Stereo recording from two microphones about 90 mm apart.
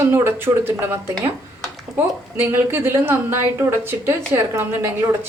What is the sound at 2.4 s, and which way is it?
Speech, 25° right (ahead or behind).